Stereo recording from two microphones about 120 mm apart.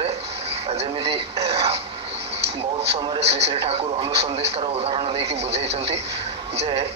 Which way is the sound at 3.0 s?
55° right (ahead or behind).